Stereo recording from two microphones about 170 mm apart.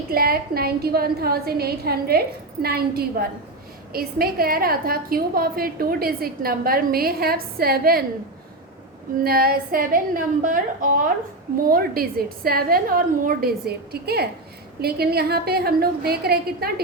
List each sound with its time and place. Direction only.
0.1 s a woman's voice: 60° right (ahead or behind)
9.1 s a woman's voice: 60° right (ahead or behind)